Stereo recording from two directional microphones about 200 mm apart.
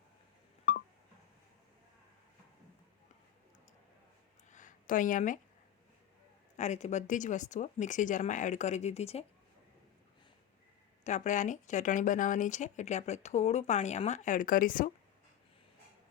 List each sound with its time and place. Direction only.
4.5 s a sound: 40° left (ahead or behind)
6.6 s speech: 35° left (ahead or behind)
11.0 s speech: 35° left (ahead or behind)